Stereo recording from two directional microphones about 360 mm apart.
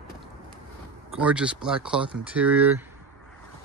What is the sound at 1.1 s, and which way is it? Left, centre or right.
Speech, centre.